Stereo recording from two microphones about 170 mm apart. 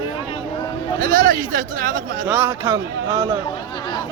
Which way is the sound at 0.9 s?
55° right (ahead or behind).